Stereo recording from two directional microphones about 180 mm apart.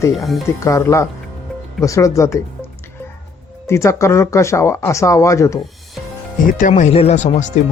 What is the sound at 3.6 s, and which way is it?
Speech, 15° left (ahead or behind).